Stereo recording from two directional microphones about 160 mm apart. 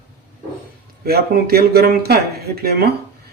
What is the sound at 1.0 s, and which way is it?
Speech, 75° right (ahead or behind).